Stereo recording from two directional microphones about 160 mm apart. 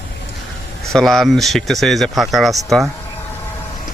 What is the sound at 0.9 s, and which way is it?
Speech, 5° left (ahead or behind).